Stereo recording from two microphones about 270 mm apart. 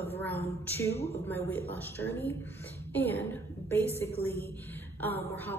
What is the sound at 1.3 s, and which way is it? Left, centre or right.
A woman's voice, centre.